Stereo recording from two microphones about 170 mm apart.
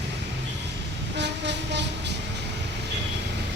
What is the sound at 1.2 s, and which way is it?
Train, 90° right.